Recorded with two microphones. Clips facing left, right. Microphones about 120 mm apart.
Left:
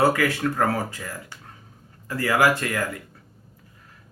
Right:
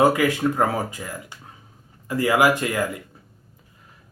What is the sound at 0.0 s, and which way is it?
Speech, 15° right (ahead or behind).